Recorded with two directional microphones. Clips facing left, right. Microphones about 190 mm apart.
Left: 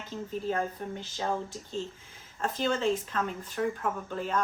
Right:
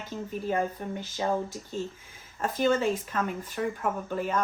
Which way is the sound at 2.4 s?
10° right (ahead or behind).